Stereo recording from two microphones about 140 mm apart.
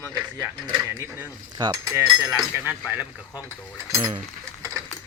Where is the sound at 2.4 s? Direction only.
10° right (ahead or behind).